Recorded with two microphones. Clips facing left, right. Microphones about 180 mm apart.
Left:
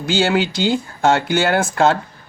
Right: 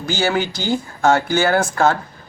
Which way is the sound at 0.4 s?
20° left (ahead or behind).